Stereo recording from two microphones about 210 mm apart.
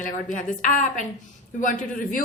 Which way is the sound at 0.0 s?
40° left (ahead or behind).